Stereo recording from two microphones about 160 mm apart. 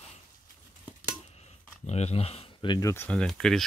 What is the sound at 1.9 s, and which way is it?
Speech, 40° left (ahead or behind).